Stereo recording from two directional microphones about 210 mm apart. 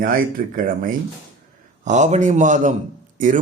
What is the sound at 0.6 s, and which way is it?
Speech, 40° right (ahead or behind).